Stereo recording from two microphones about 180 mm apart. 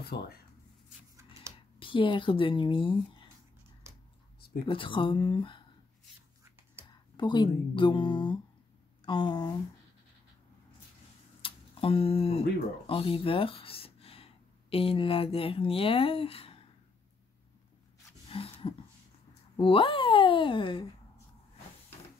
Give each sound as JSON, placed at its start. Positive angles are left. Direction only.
{"t": 0.0, "sound": "speech", "side_deg": 60}
{"t": 1.5, "sound": "computer keyboard", "side_deg": -15}
{"t": 1.8, "sound": "speech", "side_deg": 30}
{"t": 4.6, "sound": "speech", "side_deg": 30}
{"t": 6.4, "sound": "whispering", "side_deg": -15}
{"t": 6.9, "sound": "speech", "side_deg": 25}
{"t": 11.4, "sound": "speech", "side_deg": 30}
{"t": 18.3, "sound": "a sound", "side_deg": 30}
{"t": 19.5, "sound": "speech", "side_deg": 30}